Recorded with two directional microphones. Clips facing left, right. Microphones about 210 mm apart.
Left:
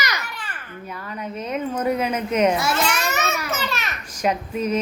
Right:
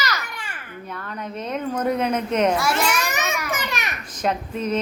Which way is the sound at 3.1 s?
15° right (ahead or behind).